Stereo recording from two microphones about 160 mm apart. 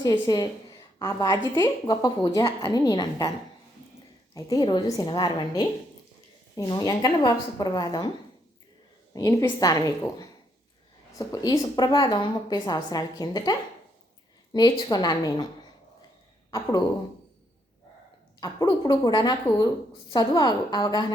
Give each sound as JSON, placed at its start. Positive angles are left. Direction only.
{"t": 0.0, "sound": "a woman's voice", "side_deg": 25}
{"t": 4.4, "sound": "a woman's voice", "side_deg": 20}
{"t": 9.1, "sound": "a woman's voice", "side_deg": 20}
{"t": 11.3, "sound": "a woman's voice", "side_deg": 25}
{"t": 18.3, "sound": "a woman's voice", "side_deg": 25}